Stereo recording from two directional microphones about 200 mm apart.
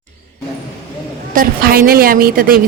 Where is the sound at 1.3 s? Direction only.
45° right (ahead or behind).